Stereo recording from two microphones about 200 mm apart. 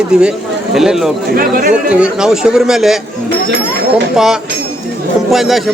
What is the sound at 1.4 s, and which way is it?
Speech, 45° right (ahead or behind).